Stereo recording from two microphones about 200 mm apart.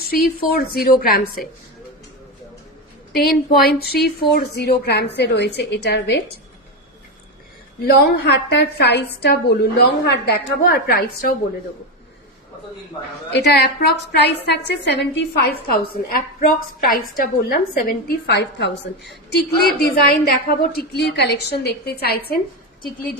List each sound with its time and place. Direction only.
0.1 s a woman's voice: 50° left (ahead or behind)
3.2 s a woman's voice: 50° left (ahead or behind)
7.8 s a woman's voice: 50° left (ahead or behind)
13.3 s a woman's voice: 55° left (ahead or behind)
15.7 s a woman's voice: 45° left (ahead or behind)